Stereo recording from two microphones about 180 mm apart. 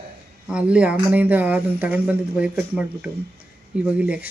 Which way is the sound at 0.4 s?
5° right (ahead or behind).